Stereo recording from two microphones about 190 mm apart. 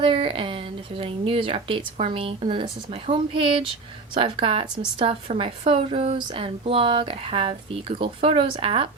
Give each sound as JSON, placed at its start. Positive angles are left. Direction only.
{"t": 0.0, "sound": "a woman's voice", "side_deg": -25}